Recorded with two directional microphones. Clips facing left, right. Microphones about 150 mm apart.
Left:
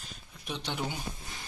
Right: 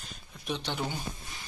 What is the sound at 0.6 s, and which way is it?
Speech, 10° left (ahead or behind).